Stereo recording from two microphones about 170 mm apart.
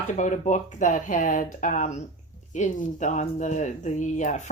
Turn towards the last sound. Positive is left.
turn(degrees=45)  # may be behind; listen again after turning